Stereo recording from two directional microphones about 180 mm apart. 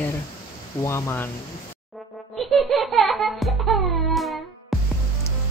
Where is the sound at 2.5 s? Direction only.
Centre (ahead or behind).